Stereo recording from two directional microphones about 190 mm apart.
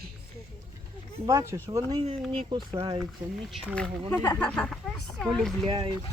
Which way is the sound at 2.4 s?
25° right (ahead or behind).